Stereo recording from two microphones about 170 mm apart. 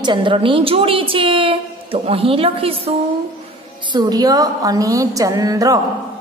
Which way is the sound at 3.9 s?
25° right (ahead or behind).